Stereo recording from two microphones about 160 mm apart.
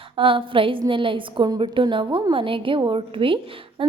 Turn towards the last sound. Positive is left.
turn(degrees=-35)  # may be behind; listen again after turning